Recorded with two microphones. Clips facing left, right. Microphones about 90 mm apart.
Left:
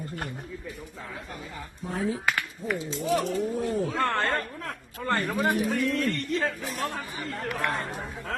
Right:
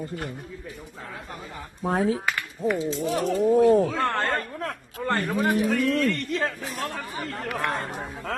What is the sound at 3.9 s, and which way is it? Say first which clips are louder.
Speech: right 1 dB; 5° right (ahead or behind).